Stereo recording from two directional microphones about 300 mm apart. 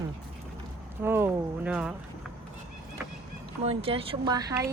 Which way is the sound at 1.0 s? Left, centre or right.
Centre.